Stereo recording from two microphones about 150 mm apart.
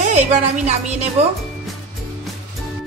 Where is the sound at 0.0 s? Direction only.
50° right (ahead or behind).